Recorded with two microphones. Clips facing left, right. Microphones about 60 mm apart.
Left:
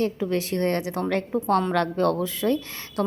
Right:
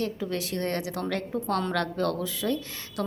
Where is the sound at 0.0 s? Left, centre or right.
Left.